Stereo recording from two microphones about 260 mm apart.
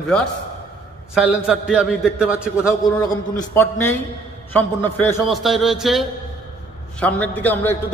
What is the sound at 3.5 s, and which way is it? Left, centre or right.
A man's voice, centre.